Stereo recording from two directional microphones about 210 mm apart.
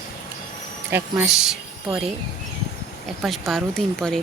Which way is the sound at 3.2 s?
Centre (ahead or behind).